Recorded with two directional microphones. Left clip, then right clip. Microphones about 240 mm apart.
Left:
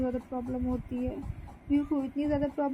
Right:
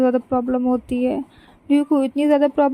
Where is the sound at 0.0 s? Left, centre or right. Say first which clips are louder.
Right 15 dB; right.